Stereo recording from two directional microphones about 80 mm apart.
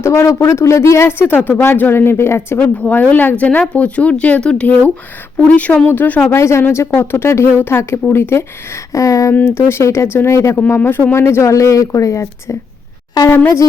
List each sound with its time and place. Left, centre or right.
0.0 s speech: left
1.4 s speech: left
2.8 s speech: centre
6.2 s speech: left
9.3 s speech: left
10.8 s speech: left
13.2 s speech: left